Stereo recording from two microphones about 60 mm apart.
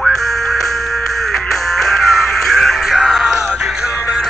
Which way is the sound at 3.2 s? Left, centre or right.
Centre.